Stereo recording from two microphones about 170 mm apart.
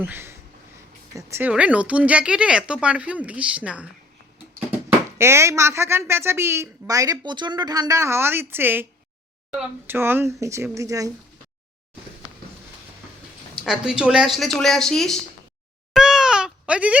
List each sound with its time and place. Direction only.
0.0 s speech: 10° right (ahead or behind)
4.9 s speech: 15° right (ahead or behind)
13.7 s a woman's voice: 5° right (ahead or behind)
15.9 s a sound: 5° right (ahead or behind)